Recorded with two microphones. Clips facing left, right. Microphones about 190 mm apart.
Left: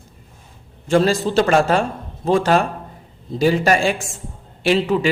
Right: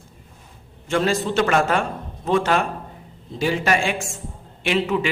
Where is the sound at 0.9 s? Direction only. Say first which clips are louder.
Left 5 dB; 35° left (ahead or behind).